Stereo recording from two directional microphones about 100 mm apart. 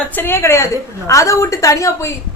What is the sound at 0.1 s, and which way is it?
A woman's voice, 20° left (ahead or behind).